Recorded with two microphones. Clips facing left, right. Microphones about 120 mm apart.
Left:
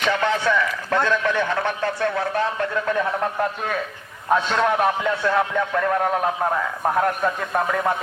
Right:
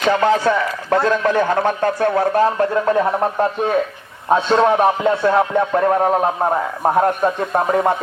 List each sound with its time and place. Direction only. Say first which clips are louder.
0.0 s speech: right 6 dB; 35° right (ahead or behind)